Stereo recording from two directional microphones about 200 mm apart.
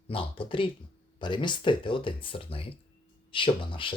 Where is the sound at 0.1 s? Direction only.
25° left (ahead or behind).